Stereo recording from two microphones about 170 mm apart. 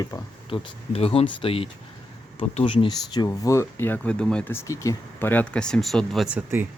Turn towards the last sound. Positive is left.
turn(degrees=-10)  # may be behind; listen again after turning